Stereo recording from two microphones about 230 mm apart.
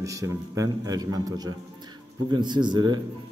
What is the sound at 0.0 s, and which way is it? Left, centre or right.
A man's voice, centre.